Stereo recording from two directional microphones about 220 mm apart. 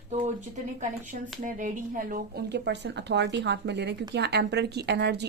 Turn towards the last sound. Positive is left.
turn(degrees=-50)  # may be behind; listen again after turning